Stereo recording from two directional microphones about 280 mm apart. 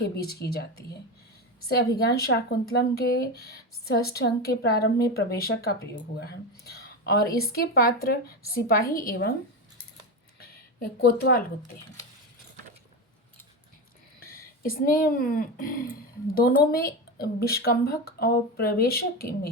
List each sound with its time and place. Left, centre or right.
0.0 s speech: left
10.4 s speech: left
14.6 s speech: left